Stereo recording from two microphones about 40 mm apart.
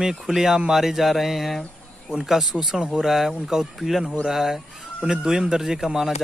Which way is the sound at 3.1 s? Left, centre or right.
Centre.